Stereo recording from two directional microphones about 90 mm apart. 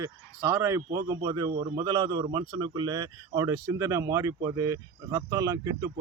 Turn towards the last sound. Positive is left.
turn(degrees=-45)  # may be behind; listen again after turning